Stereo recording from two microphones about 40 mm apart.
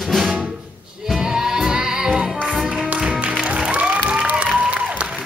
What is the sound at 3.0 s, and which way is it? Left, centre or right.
Music, right.